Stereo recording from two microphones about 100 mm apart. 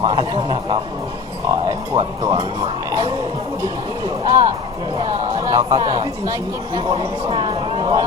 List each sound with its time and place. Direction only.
0.0 s speech: 45° right (ahead or behind)
1.5 s speech: 35° right (ahead or behind)
4.3 s speech: 35° right (ahead or behind)
6.7 s speech: 50° right (ahead or behind)